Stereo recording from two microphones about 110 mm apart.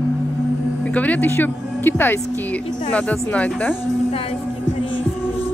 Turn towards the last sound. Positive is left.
turn(degrees=15)  # may be behind; listen again after turning